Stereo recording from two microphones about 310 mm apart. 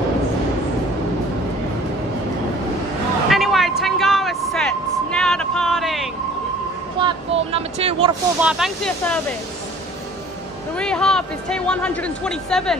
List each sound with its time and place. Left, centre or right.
3.3 s vehicle: centre
7.0 s vehicle: centre
8.4 s speech: centre
10.8 s speech: centre